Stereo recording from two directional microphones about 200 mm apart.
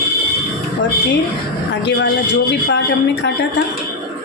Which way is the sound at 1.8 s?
55° left (ahead or behind).